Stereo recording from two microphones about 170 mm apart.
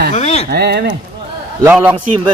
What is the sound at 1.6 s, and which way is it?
Speech, 10° right (ahead or behind).